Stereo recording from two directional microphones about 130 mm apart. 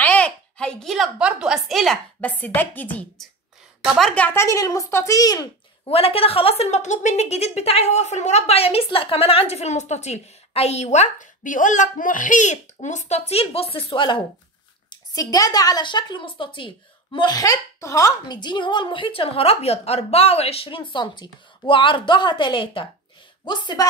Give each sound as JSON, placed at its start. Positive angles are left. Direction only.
{"t": 0.0, "sound": "a sound", "side_deg": 10}
{"t": 2.2, "sound": "a woman's voice", "side_deg": 15}
{"t": 5.9, "sound": "a woman's voice", "side_deg": 50}
{"t": 14.9, "sound": "a woman's voice", "side_deg": 30}